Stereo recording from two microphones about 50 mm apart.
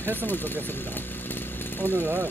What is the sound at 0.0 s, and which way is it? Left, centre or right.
Speech, right.